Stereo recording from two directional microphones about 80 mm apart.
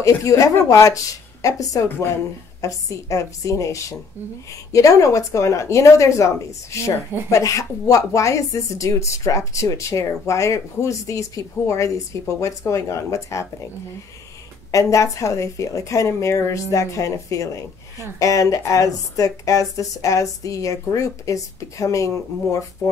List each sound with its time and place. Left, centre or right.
0.0 s a woman's voice: left
14.7 s a woman's voice: left